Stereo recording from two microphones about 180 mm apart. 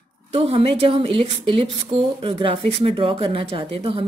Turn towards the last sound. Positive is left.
turn(degrees=-30)  # may be behind; listen again after turning